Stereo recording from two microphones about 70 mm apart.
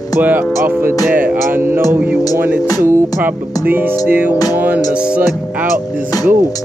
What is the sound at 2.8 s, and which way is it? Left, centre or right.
Speech, right.